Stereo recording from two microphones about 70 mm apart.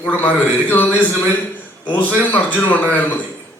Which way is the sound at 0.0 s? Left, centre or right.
Left.